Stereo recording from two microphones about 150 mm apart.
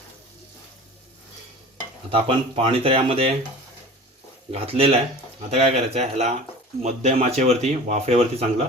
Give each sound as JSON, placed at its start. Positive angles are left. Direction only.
{"t": 2.0, "sound": "speech", "side_deg": -40}
{"t": 4.5, "sound": "speech", "side_deg": -40}